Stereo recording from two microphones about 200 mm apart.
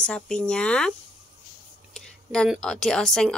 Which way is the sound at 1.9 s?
5° left (ahead or behind).